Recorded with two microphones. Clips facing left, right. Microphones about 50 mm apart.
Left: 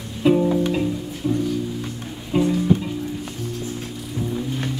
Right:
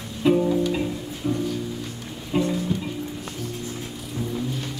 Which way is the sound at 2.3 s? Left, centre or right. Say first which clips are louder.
Left 3 dB; centre.